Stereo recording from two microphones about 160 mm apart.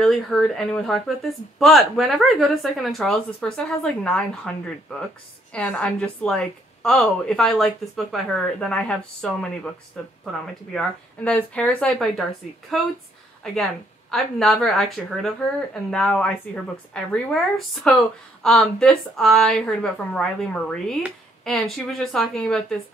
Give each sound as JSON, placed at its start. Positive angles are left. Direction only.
{"t": 0.0, "sound": "a woman's voice", "side_deg": 0}
{"t": 14.1, "sound": "a woman's voice", "side_deg": 0}